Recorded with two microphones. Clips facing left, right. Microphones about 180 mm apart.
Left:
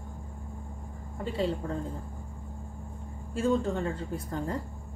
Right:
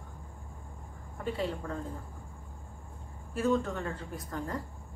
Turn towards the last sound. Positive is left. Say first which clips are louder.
# left 4 dB
turn(degrees=25)  # may be behind; listen again after turning